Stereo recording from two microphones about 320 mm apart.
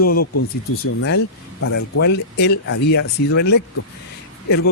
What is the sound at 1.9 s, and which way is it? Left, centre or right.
Speech, left.